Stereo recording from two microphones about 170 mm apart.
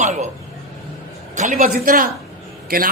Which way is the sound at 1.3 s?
50° right (ahead or behind).